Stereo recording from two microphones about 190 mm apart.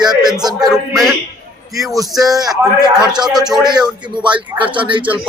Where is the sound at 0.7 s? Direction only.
Centre (ahead or behind).